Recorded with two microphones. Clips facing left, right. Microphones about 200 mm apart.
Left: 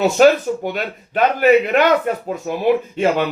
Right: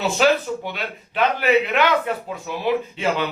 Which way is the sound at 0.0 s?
45° left (ahead or behind).